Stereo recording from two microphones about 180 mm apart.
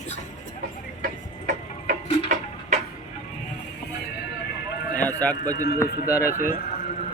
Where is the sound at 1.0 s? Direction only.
50° right (ahead or behind).